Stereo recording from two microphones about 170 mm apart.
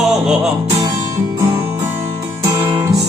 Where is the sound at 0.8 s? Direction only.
20° right (ahead or behind).